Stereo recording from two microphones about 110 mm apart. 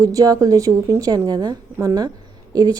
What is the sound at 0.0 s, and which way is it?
A woman's voice, 30° right (ahead or behind).